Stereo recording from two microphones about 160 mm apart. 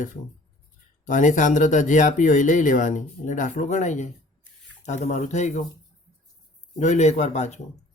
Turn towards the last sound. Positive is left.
turn(degrees=45)  # may be behind; listen again after turning